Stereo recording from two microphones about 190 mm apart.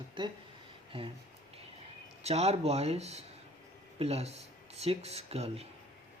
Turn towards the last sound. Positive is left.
turn(degrees=-30)  # may be behind; listen again after turning